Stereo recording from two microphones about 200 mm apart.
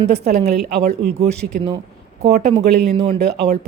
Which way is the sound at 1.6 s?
30° right (ahead or behind).